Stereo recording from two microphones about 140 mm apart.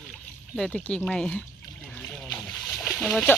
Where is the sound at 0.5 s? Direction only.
5° left (ahead or behind).